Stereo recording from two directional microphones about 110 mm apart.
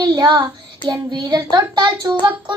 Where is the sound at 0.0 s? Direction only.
40° right (ahead or behind).